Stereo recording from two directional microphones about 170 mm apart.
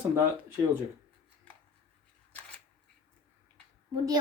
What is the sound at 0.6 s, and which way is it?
Speech, 20° right (ahead or behind).